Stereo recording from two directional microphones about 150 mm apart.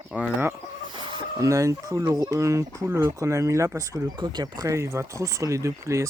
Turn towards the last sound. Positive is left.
turn(degrees=-20)  # may be behind; listen again after turning